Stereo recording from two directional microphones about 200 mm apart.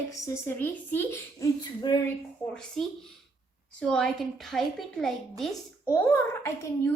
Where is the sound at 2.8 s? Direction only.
Centre (ahead or behind).